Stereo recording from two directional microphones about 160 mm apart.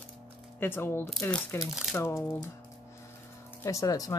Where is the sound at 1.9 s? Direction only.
15° left (ahead or behind).